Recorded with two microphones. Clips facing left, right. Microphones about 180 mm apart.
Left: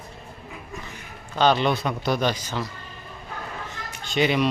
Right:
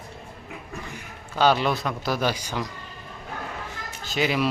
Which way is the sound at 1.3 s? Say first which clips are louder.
Left 1 dB; 5° right (ahead or behind).